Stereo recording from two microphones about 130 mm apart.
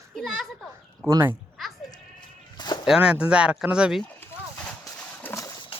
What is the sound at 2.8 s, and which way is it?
Speech, 5° right (ahead or behind).